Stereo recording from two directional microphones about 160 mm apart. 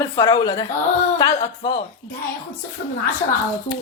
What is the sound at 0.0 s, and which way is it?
Speech, 20° left (ahead or behind).